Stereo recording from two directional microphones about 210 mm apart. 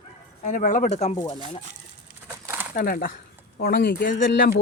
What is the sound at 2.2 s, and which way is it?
Crumpling, 10° right (ahead or behind).